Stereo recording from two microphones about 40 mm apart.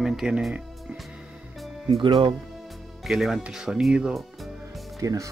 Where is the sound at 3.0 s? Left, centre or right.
Centre.